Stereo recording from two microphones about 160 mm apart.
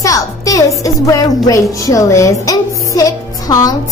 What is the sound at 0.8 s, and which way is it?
A child's voice, 20° left (ahead or behind).